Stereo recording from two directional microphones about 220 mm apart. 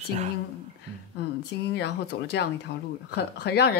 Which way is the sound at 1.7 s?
50° left (ahead or behind).